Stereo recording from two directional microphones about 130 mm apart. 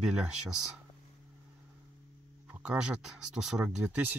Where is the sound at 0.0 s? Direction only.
5° right (ahead or behind).